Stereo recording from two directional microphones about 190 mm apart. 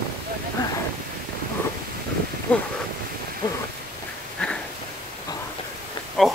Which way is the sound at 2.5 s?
10° left (ahead or behind).